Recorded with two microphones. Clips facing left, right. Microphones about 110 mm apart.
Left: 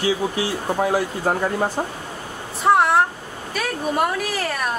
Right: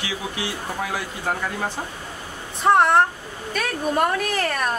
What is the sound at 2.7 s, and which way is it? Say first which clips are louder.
Speech: even; 5° left (ahead or behind).